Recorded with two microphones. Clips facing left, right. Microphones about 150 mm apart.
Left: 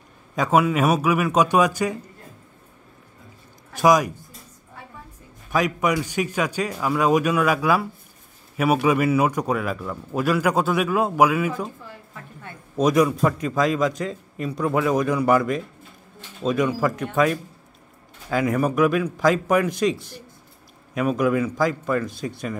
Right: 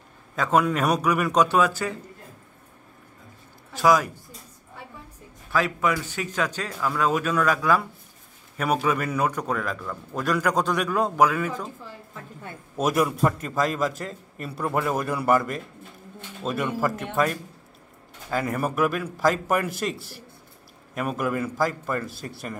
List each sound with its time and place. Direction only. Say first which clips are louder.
0.4 s a man's voice: left 3 dB; 10° left (ahead or behind)
3.7 s a man's voice: left 3 dB; 15° left (ahead or behind)
5.5 s a man's voice: left 2 dB; 15° left (ahead or behind)
12.7 s a man's voice: left 5 dB; 5° right (ahead or behind)